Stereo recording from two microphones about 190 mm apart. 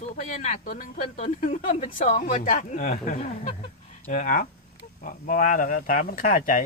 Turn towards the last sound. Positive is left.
turn(degrees=45)  # may be behind; listen again after turning